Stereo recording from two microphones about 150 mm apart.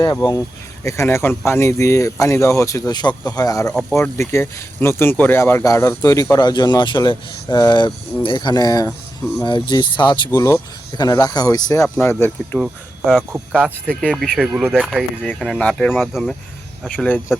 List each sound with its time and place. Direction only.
0.0 s speech: 30° left (ahead or behind)
12.5 s speech: centre (ahead or behind)
13.8 s speech: 5° left (ahead or behind)